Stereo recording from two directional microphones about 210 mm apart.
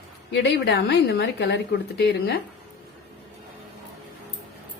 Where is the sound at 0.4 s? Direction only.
55° left (ahead or behind).